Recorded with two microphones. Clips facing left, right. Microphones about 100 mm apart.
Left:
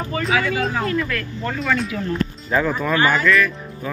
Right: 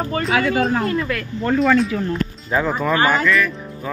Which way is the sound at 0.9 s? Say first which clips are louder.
Right 1 dB; 20° right (ahead or behind).